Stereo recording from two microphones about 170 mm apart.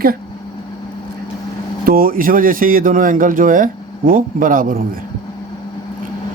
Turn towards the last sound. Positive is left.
turn(degrees=-55)  # may be behind; listen again after turning